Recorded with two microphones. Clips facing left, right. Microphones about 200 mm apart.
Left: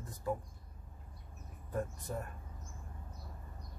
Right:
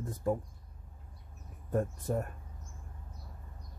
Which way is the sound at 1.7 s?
45° right (ahead or behind).